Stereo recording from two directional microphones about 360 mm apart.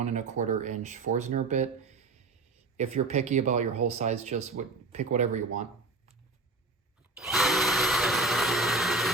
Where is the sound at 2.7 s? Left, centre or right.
Centre.